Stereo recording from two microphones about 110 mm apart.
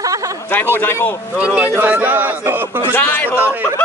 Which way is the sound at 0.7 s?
20° left (ahead or behind).